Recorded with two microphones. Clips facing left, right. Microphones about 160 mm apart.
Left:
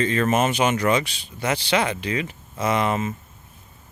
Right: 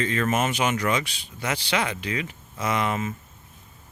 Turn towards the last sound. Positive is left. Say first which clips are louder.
# left 3 dB
turn(degrees=30)  # may be behind; listen again after turning